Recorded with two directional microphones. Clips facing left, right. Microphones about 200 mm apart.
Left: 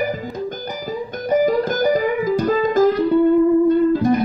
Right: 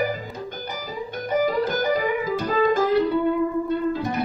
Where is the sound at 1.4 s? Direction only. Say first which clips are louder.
Left 5 dB; 40° left (ahead or behind).